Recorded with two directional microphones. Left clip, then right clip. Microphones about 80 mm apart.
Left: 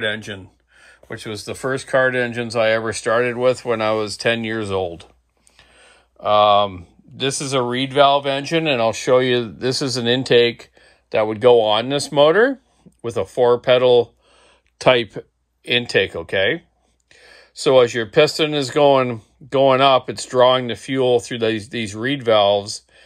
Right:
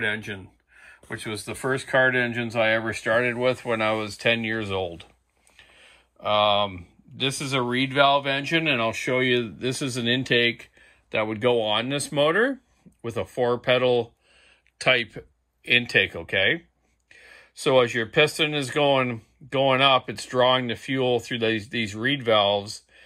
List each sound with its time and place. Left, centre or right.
0.0 s speech: left
11.1 s speech: left
14.8 s speech: left
15.7 s speech: left
17.1 s speech: centre